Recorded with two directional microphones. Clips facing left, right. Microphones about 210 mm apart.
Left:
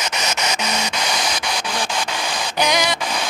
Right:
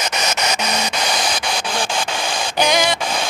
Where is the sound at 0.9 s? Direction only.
35° right (ahead or behind).